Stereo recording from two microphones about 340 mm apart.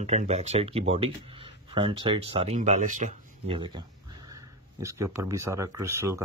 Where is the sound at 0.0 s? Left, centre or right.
Centre.